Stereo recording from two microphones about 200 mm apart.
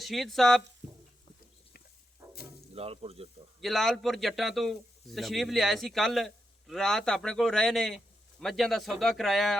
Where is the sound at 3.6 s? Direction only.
Centre (ahead or behind).